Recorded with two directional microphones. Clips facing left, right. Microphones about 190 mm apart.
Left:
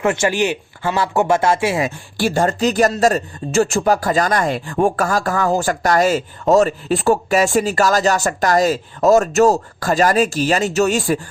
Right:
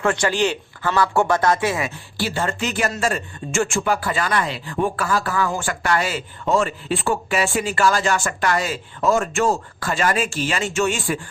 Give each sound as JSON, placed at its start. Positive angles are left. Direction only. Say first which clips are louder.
{"t": 0.0, "sound": "speech", "louder": "left 2 dB", "side_deg": 20}
{"t": 2.1, "sound": "speech", "louder": "left 7 dB", "side_deg": 45}